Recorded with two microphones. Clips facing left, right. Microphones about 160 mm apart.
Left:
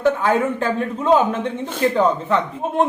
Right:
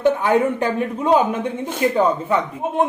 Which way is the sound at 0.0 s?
20° right (ahead or behind).